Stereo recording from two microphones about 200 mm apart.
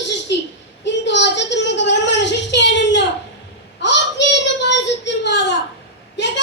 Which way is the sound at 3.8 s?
60° left (ahead or behind).